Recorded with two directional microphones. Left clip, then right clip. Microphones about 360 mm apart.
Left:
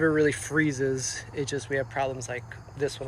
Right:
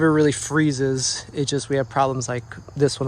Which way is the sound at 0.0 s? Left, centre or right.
Centre.